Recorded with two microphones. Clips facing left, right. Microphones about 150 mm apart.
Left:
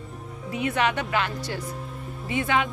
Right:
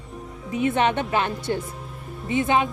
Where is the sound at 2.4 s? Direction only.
20° right (ahead or behind).